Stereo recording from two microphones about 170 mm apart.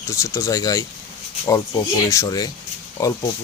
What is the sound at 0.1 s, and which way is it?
Speech, 20° left (ahead or behind).